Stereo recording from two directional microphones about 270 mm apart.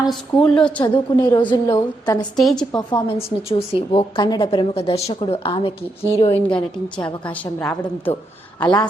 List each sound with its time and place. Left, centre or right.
0.1 s a woman's voice: centre
0.8 s a woman's voice: centre
2.3 s a woman's voice: centre
2.7 s a woman's voice: centre
6.5 s a woman's voice: centre